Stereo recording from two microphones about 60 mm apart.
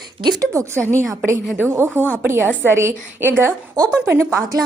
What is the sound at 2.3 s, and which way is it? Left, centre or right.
A woman's voice, right.